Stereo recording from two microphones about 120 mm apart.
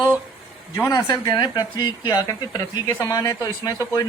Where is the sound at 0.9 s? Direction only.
35° left (ahead or behind).